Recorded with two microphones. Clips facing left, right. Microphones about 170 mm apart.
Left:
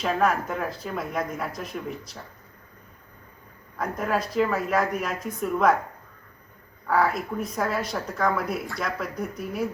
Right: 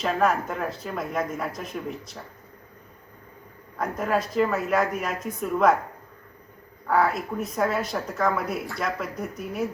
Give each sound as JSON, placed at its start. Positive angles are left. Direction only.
{"t": 0.0, "sound": "a woman's voice", "side_deg": 0}
{"t": 3.8, "sound": "a woman's voice", "side_deg": 0}
{"t": 6.8, "sound": "a woman's voice", "side_deg": 0}